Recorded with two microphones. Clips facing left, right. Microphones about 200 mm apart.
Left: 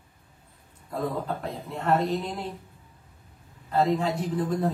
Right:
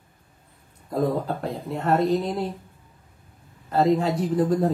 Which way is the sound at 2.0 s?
40° right (ahead or behind).